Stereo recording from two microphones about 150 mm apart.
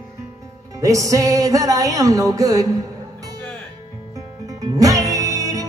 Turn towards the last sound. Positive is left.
turn(degrees=-25)  # may be behind; listen again after turning